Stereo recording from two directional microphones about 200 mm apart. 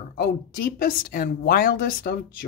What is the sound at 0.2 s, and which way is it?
A woman's voice, 45° left (ahead or behind).